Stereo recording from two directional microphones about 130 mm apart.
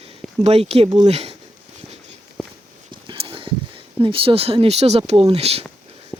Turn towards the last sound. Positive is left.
turn(degrees=-50)  # may be behind; listen again after turning